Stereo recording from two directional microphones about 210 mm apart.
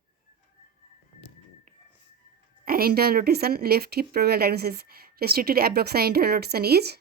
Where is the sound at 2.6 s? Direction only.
45° right (ahead or behind).